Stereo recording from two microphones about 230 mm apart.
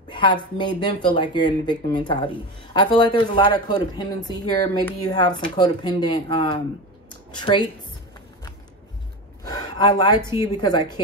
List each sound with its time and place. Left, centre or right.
0.1 s speech: centre
9.4 s a sound: centre
10.6 s speech: centre